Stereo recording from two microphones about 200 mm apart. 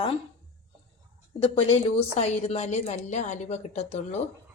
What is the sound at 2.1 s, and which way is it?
A woman's voice, 35° left (ahead or behind).